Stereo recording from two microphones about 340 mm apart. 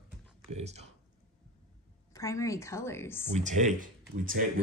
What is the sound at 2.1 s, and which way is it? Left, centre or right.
Speech, centre.